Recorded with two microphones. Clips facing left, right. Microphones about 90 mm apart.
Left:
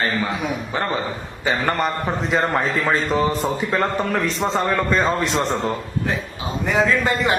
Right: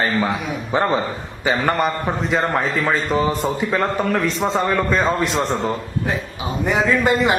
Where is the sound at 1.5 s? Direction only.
5° right (ahead or behind).